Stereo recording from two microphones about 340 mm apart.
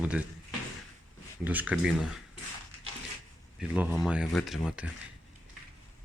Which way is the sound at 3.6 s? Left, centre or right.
Centre.